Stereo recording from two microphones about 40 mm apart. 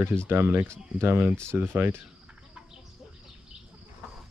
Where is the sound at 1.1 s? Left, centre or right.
Right.